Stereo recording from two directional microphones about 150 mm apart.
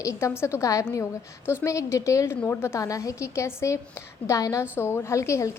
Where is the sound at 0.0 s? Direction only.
20° left (ahead or behind).